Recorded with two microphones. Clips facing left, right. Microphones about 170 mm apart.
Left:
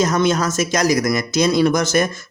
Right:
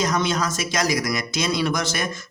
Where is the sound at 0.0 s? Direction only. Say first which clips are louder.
Left 5 dB; 50° left (ahead or behind).